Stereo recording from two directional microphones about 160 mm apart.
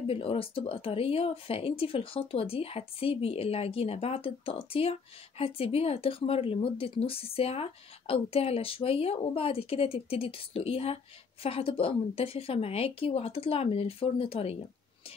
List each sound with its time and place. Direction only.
0.0 s speech: 35° left (ahead or behind)